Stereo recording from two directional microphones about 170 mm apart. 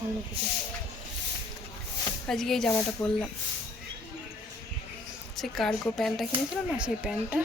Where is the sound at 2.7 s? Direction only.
15° left (ahead or behind).